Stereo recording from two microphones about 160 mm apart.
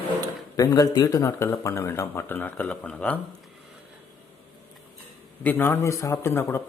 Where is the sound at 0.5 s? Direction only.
20° left (ahead or behind); by 3.2 s 5° left (ahead or behind).